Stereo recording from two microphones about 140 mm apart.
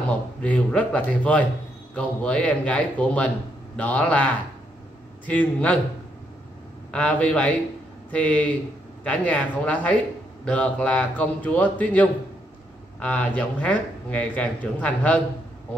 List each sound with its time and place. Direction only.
0.4 s speech: 10° left (ahead or behind)
6.9 s speech: 10° left (ahead or behind)